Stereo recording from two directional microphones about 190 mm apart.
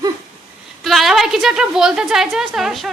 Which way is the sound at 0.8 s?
Centre (ahead or behind).